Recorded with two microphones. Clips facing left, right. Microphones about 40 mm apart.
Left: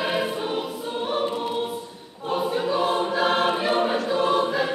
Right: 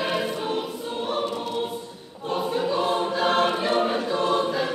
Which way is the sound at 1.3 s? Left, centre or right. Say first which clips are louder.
Left 2 dB; left.